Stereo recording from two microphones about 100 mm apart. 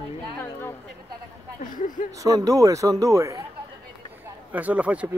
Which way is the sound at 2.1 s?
35° right (ahead or behind).